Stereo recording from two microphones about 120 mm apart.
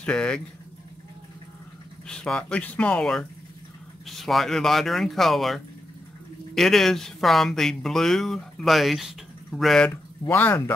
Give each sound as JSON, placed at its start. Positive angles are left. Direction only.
{"t": 0.0, "sound": "speech", "side_deg": 10}
{"t": 2.0, "sound": "speech", "side_deg": 5}
{"t": 10.2, "sound": "speech", "side_deg": 15}